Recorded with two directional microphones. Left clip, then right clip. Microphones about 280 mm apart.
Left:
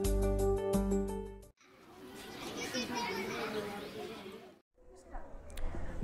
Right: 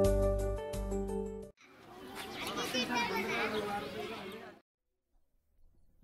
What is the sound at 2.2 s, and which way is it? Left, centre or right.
Chatter, centre.